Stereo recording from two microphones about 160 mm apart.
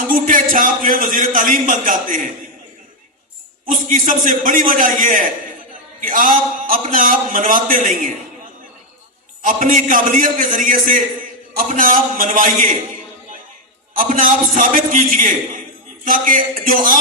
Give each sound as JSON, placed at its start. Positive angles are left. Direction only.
{"t": 0.1, "sound": "a man's voice", "side_deg": -55}
{"t": 3.7, "sound": "a man's voice", "side_deg": -55}
{"t": 9.4, "sound": "a man's voice", "side_deg": -55}
{"t": 13.9, "sound": "a man's voice", "side_deg": -60}